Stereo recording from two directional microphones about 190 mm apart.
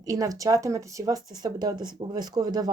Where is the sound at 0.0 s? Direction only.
20° right (ahead or behind).